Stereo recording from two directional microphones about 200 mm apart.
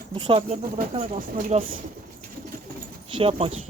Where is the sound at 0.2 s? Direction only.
25° right (ahead or behind).